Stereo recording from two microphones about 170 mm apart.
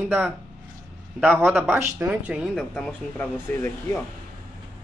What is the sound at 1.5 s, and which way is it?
Speech, 10° right (ahead or behind).